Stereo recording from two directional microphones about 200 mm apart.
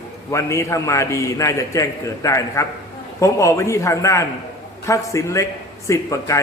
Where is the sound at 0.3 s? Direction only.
15° left (ahead or behind).